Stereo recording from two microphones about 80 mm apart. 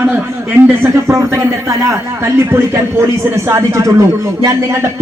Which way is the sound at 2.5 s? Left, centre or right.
Right.